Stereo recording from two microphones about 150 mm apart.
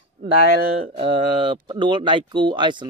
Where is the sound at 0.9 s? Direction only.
35° right (ahead or behind).